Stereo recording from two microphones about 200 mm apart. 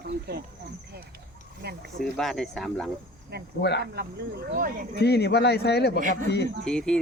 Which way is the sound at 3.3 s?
55° right (ahead or behind).